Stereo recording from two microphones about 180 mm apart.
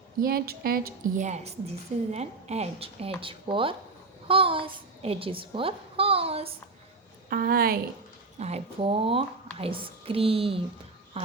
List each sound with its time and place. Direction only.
0.2 s speech: 55° right (ahead or behind)
1.3 s a woman's voice: 35° right (ahead or behind)
7.3 s speech: 55° right (ahead or behind)
8.4 s a woman's voice: 35° right (ahead or behind)